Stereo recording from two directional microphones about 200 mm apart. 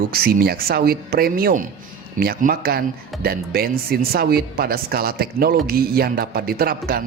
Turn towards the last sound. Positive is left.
turn(degrees=-50)  # may be behind; listen again after turning